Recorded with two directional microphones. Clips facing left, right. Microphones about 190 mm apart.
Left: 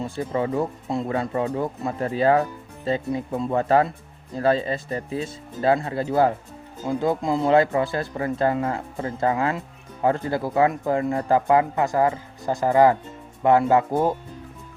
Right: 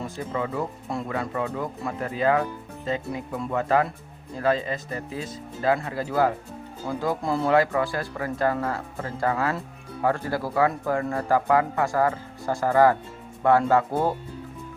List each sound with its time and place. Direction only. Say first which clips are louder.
0.0 s speech: left 4 dB; 30° left (ahead or behind); by 14.2 s 15° left (ahead or behind)